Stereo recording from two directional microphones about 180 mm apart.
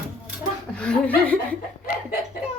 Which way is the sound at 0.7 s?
5° left (ahead or behind).